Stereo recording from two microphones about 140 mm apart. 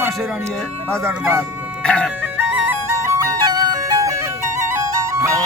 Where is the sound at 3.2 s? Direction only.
25° right (ahead or behind).